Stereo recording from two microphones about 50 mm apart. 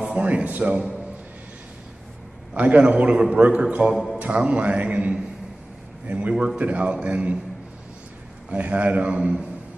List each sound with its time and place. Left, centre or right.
0.0 s a man's voice: right
2.5 s a man's voice: right
3.9 s a man's voice: centre
4.3 s a man's voice: right
6.3 s a man's voice: centre
8.5 s a man's voice: right